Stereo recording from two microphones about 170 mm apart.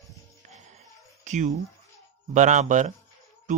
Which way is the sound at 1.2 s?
45° right (ahead or behind).